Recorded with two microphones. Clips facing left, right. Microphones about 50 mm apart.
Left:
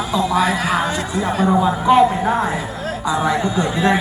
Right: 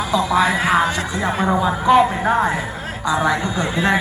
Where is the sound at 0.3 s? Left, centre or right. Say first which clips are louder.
Right 2 dB; right.